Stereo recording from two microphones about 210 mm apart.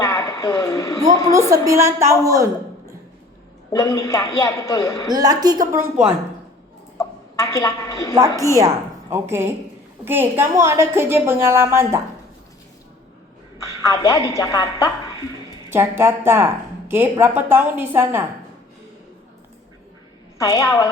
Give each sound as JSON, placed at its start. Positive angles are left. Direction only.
{"t": 0.0, "sound": "a sound", "side_deg": 15}
{"t": 1.3, "sound": "a woman's voice", "side_deg": -15}
{"t": 3.7, "sound": "a man's voice", "side_deg": 15}
{"t": 5.1, "sound": "a woman's voice", "side_deg": -20}
{"t": 7.3, "sound": "a man's voice", "side_deg": 15}
{"t": 8.2, "sound": "a woman's voice", "side_deg": -15}
{"t": 13.8, "sound": "a man's voice", "side_deg": 15}
{"t": 15.7, "sound": "a woman's voice", "side_deg": -10}
{"t": 20.4, "sound": "a man's voice", "side_deg": 15}